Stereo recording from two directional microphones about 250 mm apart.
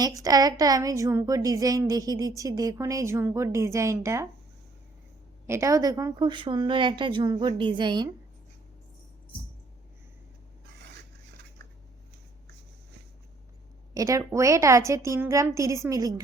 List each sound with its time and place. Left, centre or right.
0.2 s a woman's voice: centre
5.5 s a woman's voice: centre
13.9 s a woman's voice: centre